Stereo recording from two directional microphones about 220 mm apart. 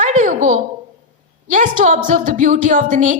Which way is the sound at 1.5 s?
35° right (ahead or behind).